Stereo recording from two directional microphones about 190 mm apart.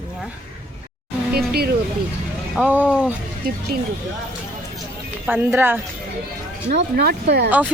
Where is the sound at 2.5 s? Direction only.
5° right (ahead or behind).